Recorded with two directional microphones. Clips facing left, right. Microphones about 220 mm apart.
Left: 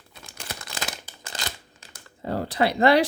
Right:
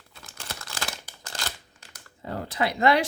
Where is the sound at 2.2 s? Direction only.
35° left (ahead or behind).